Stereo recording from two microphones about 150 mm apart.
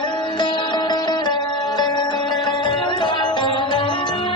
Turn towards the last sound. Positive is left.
turn(degrees=30)  # may be behind; listen again after turning